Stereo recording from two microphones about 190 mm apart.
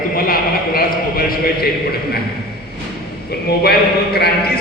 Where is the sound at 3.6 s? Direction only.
55° left (ahead or behind).